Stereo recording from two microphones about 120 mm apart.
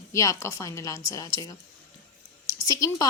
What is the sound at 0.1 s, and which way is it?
A woman's voice, 25° left (ahead or behind).